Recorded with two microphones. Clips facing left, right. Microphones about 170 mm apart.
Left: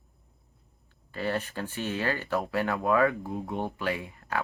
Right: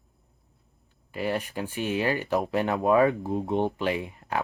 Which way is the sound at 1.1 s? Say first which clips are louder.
Right 2 dB; 15° right (ahead or behind).